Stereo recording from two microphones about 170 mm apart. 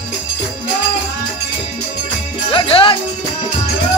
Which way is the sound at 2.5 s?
30° left (ahead or behind).